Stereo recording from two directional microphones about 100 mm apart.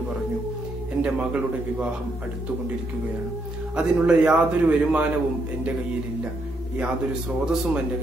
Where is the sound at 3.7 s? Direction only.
10° right (ahead or behind).